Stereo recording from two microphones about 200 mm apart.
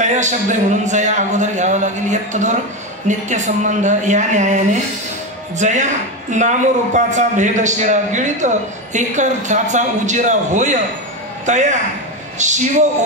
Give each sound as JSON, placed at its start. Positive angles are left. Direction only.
{"t": 0.0, "sound": "a man's voice", "side_deg": -35}